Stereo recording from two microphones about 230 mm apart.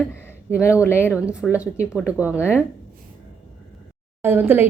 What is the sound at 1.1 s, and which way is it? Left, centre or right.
A woman's voice, centre.